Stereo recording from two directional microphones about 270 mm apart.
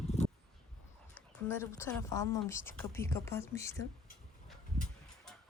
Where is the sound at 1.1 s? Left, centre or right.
Centre.